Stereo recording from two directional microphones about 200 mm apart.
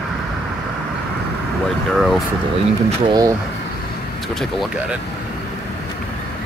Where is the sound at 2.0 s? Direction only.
Centre (ahead or behind).